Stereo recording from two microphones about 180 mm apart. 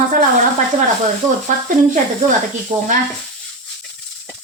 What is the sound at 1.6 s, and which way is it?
Speech, 45° right (ahead or behind).